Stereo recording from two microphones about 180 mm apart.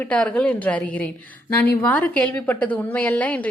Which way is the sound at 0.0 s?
5° left (ahead or behind).